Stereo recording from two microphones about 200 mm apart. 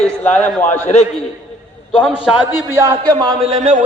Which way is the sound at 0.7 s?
35° left (ahead or behind).